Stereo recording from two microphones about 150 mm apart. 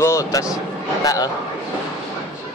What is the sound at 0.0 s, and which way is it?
Speech, 20° left (ahead or behind).